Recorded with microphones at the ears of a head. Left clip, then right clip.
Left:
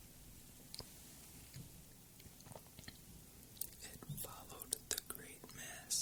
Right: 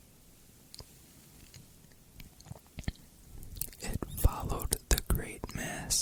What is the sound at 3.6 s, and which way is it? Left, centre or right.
Whispering, right.